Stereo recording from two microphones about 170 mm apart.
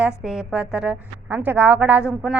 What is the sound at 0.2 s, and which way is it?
A woman's voice, centre (ahead or behind).